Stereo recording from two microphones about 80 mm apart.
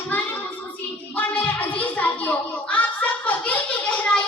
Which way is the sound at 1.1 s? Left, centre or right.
Left.